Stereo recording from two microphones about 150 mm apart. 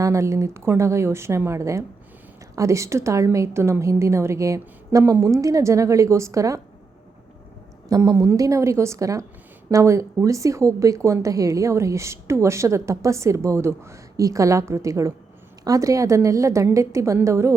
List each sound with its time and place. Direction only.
0.0 s a woman's voice: 20° right (ahead or behind)
7.9 s a woman's voice: 20° right (ahead or behind)